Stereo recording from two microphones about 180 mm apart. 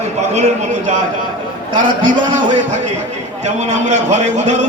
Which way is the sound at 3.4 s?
40° right (ahead or behind).